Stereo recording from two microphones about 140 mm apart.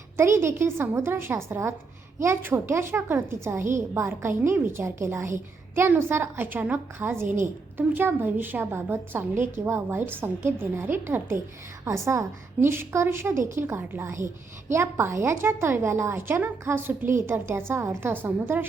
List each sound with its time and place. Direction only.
0.2 s a woman's voice: 20° right (ahead or behind)